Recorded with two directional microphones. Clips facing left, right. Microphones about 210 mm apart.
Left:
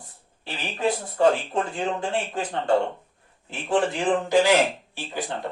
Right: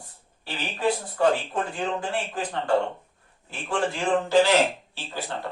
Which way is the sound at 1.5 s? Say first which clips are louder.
Left 2 dB; 25° left (ahead or behind).